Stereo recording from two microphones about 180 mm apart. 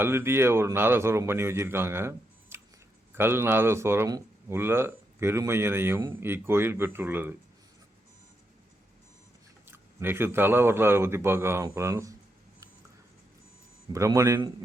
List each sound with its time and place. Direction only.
0.0 s speech: 15° right (ahead or behind)
9.6 s speech: 10° right (ahead or behind)
13.9 s speech: 15° right (ahead or behind)